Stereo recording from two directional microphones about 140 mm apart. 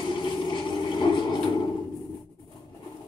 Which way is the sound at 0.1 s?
35° left (ahead or behind).